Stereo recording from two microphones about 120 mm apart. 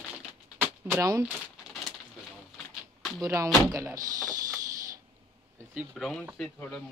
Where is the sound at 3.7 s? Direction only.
30° right (ahead or behind).